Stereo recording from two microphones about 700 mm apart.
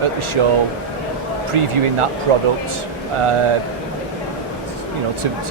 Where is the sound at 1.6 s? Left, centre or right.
Right.